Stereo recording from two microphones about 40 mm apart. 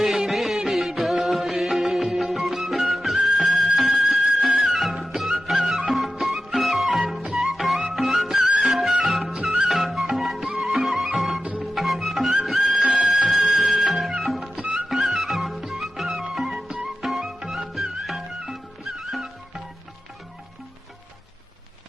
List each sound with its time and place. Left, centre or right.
0.0 s music: centre
16.6 s music: centre
17.0 s music: centre